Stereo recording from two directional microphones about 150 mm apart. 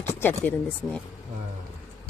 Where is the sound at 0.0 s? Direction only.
15° left (ahead or behind).